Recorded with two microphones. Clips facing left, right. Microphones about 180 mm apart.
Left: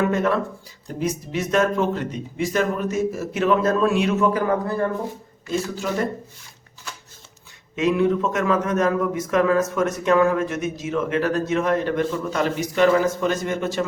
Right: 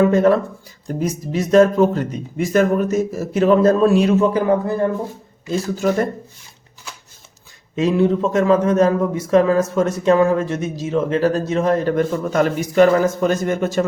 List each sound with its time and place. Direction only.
0.0 s a man's voice: 35° right (ahead or behind)
5.5 s speech: 40° right (ahead or behind)
7.8 s a man's voice: 30° right (ahead or behind)